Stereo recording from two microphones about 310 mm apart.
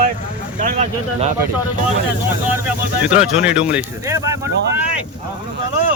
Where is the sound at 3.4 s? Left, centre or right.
Centre.